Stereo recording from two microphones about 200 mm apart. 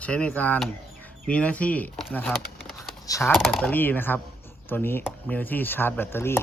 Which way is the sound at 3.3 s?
Centre (ahead or behind).